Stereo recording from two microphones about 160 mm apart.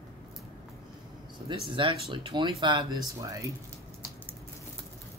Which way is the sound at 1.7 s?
30° right (ahead or behind).